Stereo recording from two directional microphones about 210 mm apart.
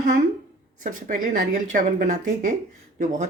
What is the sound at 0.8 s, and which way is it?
Speech, 40° right (ahead or behind).